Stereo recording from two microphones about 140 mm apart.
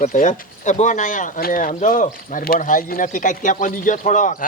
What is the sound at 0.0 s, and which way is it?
Speech, 65° left (ahead or behind).